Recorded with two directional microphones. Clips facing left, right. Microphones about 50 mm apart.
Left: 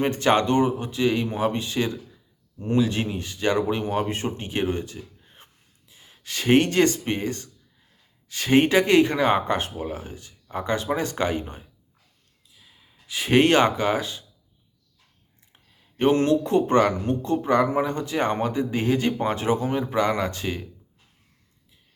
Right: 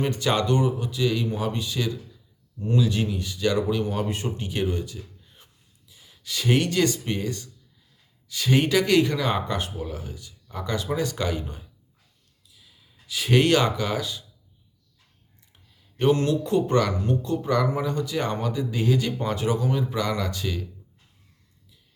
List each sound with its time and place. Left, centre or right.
0.0 s speech: left
12.5 s gasp: left
13.1 s speech: left
15.5 s speech: left